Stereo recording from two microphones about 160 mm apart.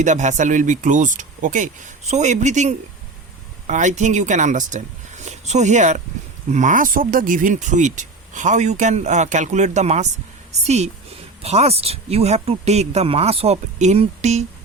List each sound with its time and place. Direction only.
0.0 s speech: 50° right (ahead or behind)